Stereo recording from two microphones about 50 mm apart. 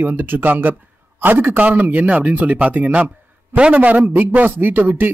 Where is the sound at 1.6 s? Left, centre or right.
Right.